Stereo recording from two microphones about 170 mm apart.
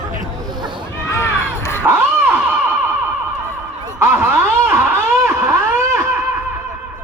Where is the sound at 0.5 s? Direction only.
25° right (ahead or behind).